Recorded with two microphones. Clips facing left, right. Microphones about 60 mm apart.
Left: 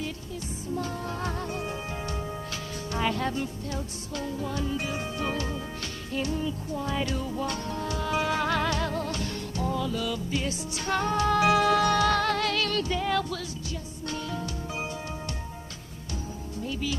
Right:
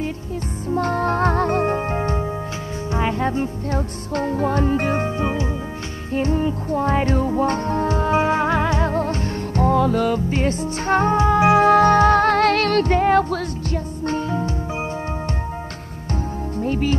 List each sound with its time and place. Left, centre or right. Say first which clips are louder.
0.7 s music: right 14 dB; right
3.7 s music: right 10 dB; right
5.1 s music: right 7 dB; right
6.1 s music: right 9 dB; right
9.7 s music: right 12 dB; right
16.5 s music: right 11 dB; right